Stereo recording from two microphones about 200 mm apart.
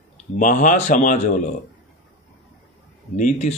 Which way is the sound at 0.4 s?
40° left (ahead or behind).